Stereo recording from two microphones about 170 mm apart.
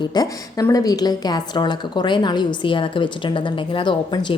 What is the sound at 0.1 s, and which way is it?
Speech, 20° left (ahead or behind).